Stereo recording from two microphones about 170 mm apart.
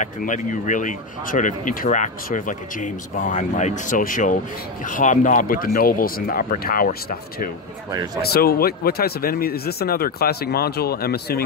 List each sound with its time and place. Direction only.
0.0 s speech: 50° left (ahead or behind); by 11.4 s 65° left (ahead or behind)